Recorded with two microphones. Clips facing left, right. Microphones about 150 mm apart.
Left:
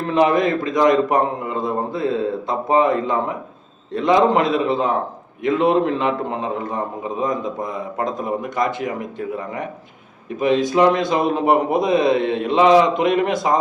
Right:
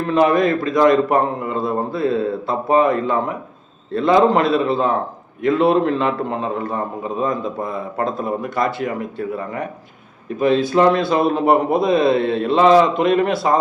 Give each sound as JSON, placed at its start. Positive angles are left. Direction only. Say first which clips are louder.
{"t": 0.1, "sound": "a man's voice", "louder": "right 1 dB", "side_deg": 20}